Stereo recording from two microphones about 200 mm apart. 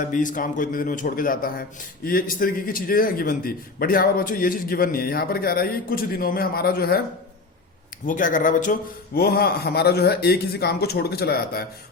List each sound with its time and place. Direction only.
0.0 s a man's voice: 40° left (ahead or behind)
8.0 s a man's voice: 40° left (ahead or behind)